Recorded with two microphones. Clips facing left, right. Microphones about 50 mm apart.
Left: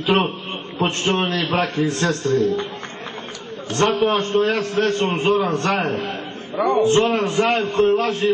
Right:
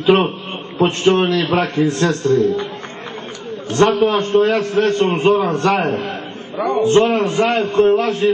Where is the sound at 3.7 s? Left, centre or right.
Right.